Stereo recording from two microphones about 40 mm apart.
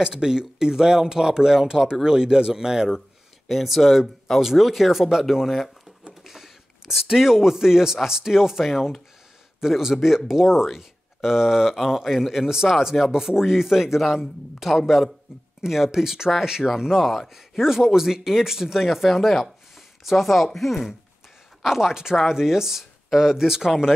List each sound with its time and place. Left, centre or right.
0.0 s speech: centre
3.4 s speech: centre
21.6 s speech: centre